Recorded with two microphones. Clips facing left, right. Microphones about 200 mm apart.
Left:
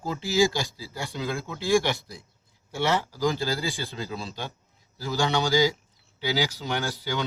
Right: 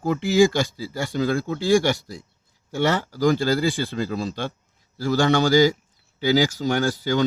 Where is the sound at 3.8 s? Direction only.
50° right (ahead or behind).